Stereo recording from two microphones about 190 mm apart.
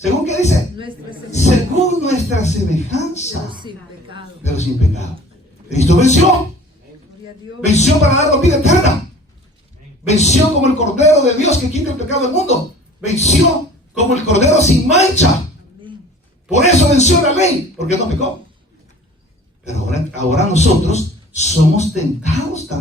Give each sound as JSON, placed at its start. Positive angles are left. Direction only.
{"t": 0.0, "sound": "speech", "side_deg": 35}
{"t": 3.5, "sound": "a woman's voice", "side_deg": -25}
{"t": 4.4, "sound": "speech", "side_deg": 35}
{"t": 7.6, "sound": "speech", "side_deg": 35}
{"t": 10.1, "sound": "speech", "side_deg": 35}
{"t": 13.9, "sound": "speech", "side_deg": 35}
{"t": 16.5, "sound": "speech", "side_deg": 35}
{"t": 19.6, "sound": "speech", "side_deg": 35}